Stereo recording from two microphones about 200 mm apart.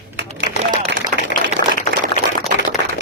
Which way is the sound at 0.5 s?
40° left (ahead or behind).